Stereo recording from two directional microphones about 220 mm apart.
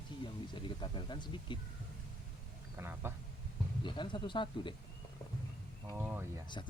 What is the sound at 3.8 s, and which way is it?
Speech, 20° left (ahead or behind).